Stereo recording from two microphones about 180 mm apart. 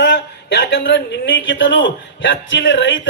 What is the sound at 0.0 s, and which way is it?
A man's voice, 65° left (ahead or behind).